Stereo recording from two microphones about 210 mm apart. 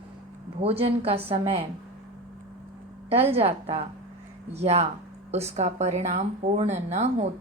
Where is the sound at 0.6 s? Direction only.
30° right (ahead or behind).